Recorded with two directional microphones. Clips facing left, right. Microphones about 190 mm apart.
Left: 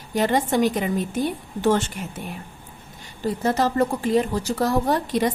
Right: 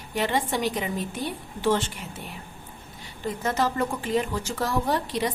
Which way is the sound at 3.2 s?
35° left (ahead or behind).